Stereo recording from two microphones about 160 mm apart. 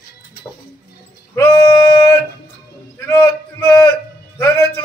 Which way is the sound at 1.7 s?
25° left (ahead or behind).